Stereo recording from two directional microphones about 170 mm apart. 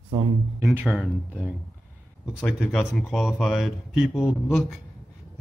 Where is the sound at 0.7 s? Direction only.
5° right (ahead or behind).